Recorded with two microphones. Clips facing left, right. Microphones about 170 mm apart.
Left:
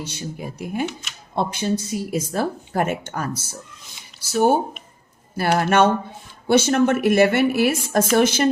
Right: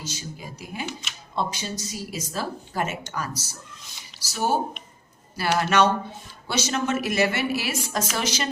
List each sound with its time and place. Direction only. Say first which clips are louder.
0.0 s speech: left 6 dB; 60° left (ahead or behind)